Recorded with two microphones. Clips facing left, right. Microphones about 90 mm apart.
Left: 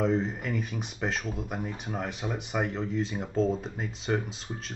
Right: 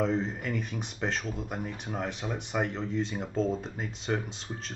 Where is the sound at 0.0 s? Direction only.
Centre (ahead or behind).